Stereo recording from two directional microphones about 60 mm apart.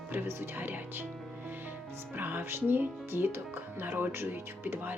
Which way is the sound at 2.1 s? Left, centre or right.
Right.